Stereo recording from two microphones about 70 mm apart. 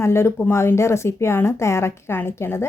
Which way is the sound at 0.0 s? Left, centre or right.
Left.